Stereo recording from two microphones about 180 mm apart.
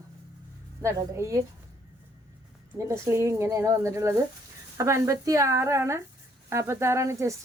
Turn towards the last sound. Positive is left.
turn(degrees=-15)  # may be behind; listen again after turning